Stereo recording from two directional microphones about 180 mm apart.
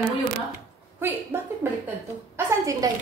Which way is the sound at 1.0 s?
15° right (ahead or behind).